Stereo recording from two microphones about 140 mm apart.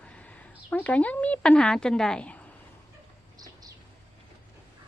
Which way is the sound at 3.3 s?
25° right (ahead or behind).